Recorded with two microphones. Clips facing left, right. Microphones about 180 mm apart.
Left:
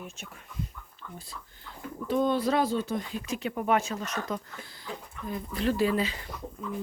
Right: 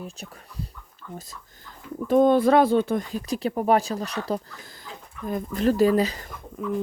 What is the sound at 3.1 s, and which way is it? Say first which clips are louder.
Speech: right 6 dB; 40° right (ahead or behind).